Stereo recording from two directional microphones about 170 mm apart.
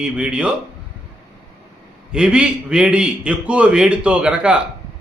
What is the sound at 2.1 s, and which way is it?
A man's voice, 5° right (ahead or behind).